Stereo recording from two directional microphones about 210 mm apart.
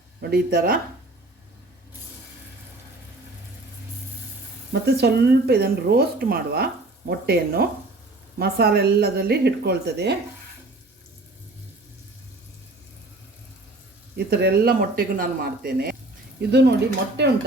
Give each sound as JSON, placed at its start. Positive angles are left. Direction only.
{"t": 0.2, "sound": "speech", "side_deg": -45}
{"t": 4.7, "sound": "speech", "side_deg": -50}
{"t": 14.2, "sound": "speech", "side_deg": -50}